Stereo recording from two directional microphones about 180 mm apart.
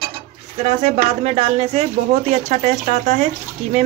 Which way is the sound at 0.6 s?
35° right (ahead or behind).